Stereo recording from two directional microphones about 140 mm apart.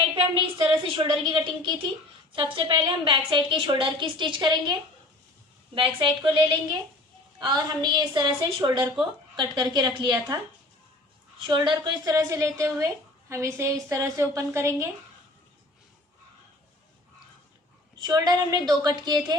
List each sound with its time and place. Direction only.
0.1 s a sound: 35° right (ahead or behind)
2.3 s a woman's voice: 35° right (ahead or behind)
11.4 s a woman's voice: 35° right (ahead or behind)
17.9 s a woman's voice: 30° right (ahead or behind)